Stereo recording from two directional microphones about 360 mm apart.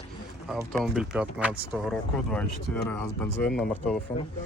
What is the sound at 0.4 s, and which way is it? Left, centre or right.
Speech, centre.